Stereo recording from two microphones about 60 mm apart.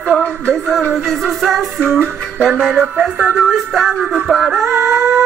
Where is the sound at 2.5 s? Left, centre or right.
Centre.